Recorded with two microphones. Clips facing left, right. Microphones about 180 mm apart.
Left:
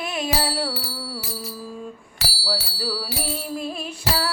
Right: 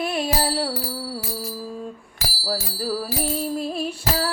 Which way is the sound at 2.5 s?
45° right (ahead or behind).